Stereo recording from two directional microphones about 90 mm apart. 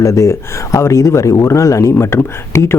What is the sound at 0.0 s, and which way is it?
Speech, 35° left (ahead or behind).